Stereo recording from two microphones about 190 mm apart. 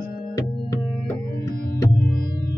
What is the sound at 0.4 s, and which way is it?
Music, 15° left (ahead or behind).